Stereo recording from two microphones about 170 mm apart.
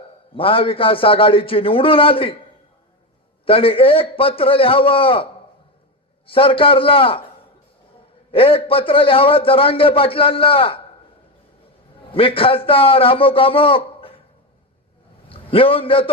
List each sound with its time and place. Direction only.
0.3 s a man's voice: 30° left (ahead or behind)
3.4 s a man's voice: 35° left (ahead or behind)
8.3 s a man's voice: 35° left (ahead or behind)
12.1 s a man's voice: 35° left (ahead or behind)
15.3 s a man's voice: 35° left (ahead or behind)